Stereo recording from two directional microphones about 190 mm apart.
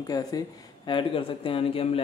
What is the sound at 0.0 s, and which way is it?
Speech, 20° left (ahead or behind).